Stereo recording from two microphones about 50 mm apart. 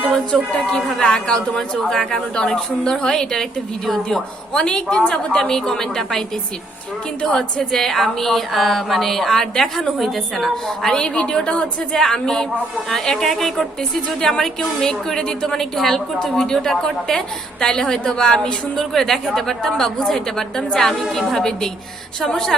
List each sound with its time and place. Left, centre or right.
0.5 s a woman's voice: centre
4.5 s a woman's voice: centre
7.3 s speech: centre
10.9 s a woman's voice: centre